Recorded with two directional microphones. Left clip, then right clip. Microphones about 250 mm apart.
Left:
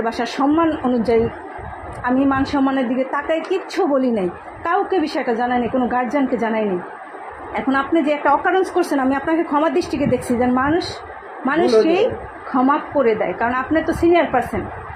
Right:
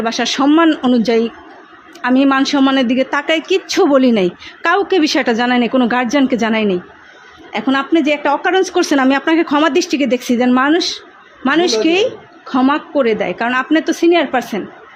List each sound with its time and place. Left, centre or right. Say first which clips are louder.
0.0 s a woman's voice: right 4 dB; right